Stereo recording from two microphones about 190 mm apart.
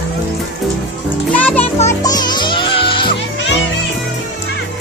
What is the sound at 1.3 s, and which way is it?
Music, 10° left (ahead or behind).